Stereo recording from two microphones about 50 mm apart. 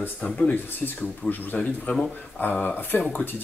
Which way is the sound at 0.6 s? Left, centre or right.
Left.